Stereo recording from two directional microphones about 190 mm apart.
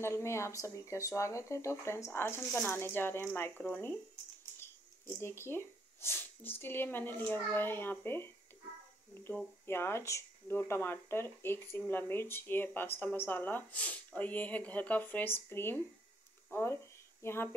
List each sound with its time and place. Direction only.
0.0 s speech: 15° left (ahead or behind)